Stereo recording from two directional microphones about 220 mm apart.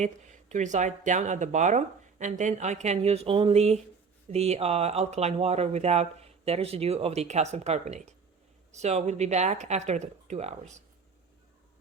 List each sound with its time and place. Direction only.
0.0 s speech: 35° right (ahead or behind)